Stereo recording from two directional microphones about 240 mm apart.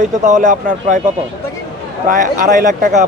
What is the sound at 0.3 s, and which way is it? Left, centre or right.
Speech, right.